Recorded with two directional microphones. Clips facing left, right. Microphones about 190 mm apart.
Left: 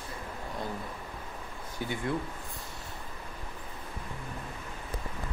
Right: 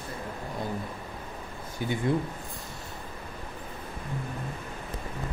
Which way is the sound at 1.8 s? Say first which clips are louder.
Right 4 dB; 15° right (ahead or behind).